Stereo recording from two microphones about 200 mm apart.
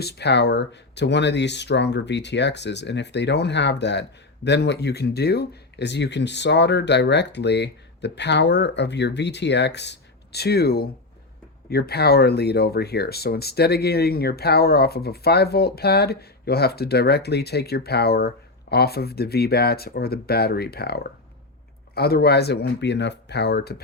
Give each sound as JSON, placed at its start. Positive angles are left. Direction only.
{"t": 0.0, "sound": "speech", "side_deg": 55}